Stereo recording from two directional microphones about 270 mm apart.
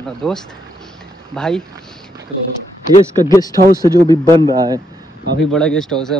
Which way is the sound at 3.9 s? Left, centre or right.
Centre.